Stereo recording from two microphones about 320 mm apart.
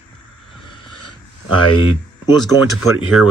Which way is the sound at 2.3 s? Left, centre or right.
Centre.